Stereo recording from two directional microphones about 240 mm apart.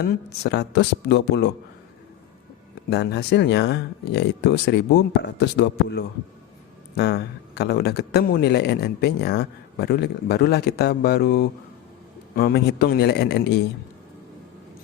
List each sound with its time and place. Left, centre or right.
0.4 s speech: left
2.9 s speech: left